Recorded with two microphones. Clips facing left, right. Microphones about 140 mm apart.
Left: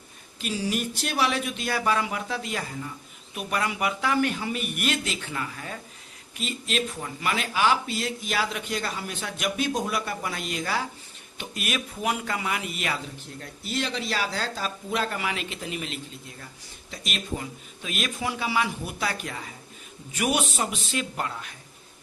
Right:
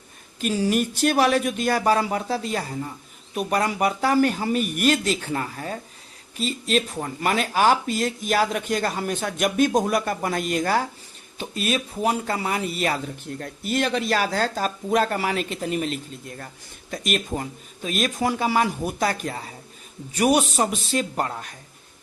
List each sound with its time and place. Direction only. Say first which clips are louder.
0.3 s speech: right 7 dB; 45° right (ahead or behind)
11.3 s speech: right 6 dB; 30° right (ahead or behind)
13.4 s speech: right 6 dB; 55° right (ahead or behind)